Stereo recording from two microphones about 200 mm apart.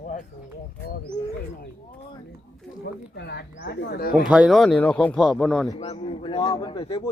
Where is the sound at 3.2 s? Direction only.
55° left (ahead or behind).